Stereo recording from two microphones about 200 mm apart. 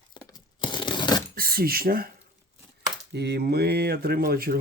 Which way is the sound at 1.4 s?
45° right (ahead or behind).